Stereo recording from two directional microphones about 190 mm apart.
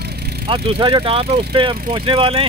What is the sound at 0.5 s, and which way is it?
Speech, 25° right (ahead or behind).